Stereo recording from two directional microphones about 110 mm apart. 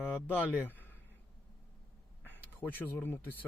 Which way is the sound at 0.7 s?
15° left (ahead or behind).